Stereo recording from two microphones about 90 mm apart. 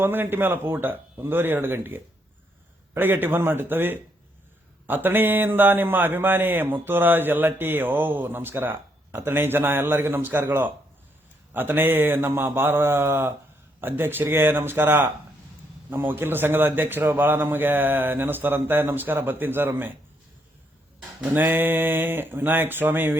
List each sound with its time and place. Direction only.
0.0 s a man's voice: 25° right (ahead or behind)
21.2 s a man's voice: 20° right (ahead or behind)